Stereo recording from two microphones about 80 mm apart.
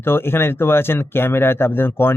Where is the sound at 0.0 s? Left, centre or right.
Left.